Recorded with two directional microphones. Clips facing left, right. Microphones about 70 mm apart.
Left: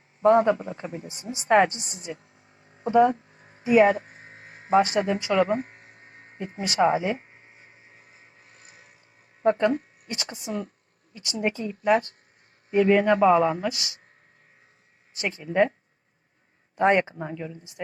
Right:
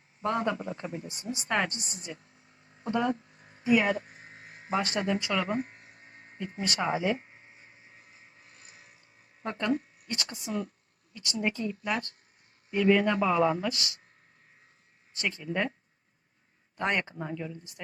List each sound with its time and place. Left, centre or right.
0.2 s speech: left
2.6 s a sound: left
3.6 s mains hum: left
4.8 s speech: left
8.5 s a sound: left
9.4 s speech: left
15.1 s speech: left
16.7 s speech: left